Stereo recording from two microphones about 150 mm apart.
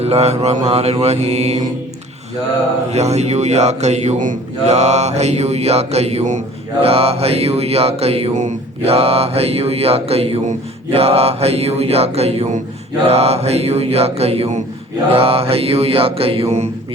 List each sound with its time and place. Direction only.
0.0 s music: 45° right (ahead or behind)
2.9 s music: 45° right (ahead or behind)
15.1 s mantra: 40° right (ahead or behind)